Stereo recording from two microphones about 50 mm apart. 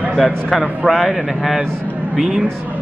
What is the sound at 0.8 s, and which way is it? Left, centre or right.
Speech, centre.